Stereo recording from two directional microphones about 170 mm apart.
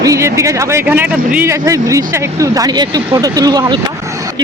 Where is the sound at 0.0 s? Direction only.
20° right (ahead or behind).